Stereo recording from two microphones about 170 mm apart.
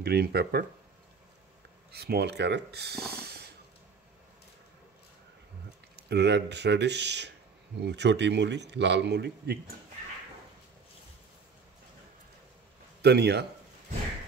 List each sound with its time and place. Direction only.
0.0 s speech: 65° right (ahead or behind)
1.9 s speech: 70° right (ahead or behind)
3.1 s snort: 70° right (ahead or behind)
5.9 s a man's voice: 75° right (ahead or behind)
13.0 s speech: 75° right (ahead or behind)